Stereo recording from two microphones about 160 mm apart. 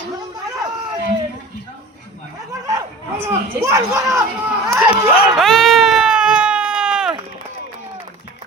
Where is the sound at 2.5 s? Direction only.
20° right (ahead or behind).